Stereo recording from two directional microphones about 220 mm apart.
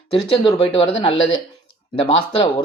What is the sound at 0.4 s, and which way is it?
A man's voice, 25° left (ahead or behind).